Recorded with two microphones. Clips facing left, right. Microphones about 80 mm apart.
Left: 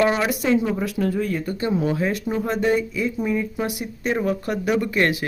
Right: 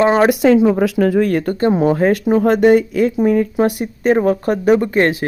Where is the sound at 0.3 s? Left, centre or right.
Right.